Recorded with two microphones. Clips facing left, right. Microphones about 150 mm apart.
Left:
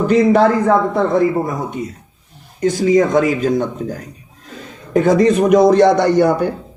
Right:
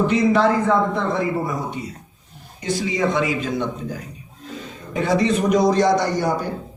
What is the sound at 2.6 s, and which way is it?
A man's voice, 45° left (ahead or behind).